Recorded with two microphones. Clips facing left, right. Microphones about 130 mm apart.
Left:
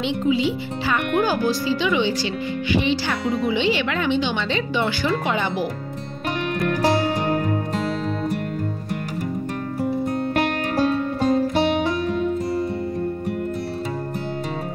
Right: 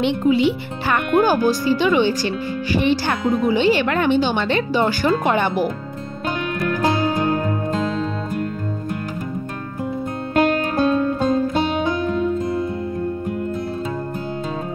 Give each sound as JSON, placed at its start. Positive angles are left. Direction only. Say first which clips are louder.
{"t": 0.0, "sound": "speech", "louder": "right 4 dB", "side_deg": -55}
{"t": 4.7, "sound": "speech", "louder": "right 4 dB", "side_deg": -40}